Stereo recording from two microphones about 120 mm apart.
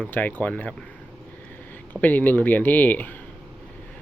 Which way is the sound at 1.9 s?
15° left (ahead or behind).